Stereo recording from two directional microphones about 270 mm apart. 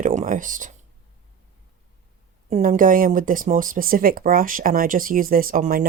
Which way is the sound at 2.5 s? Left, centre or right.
Right.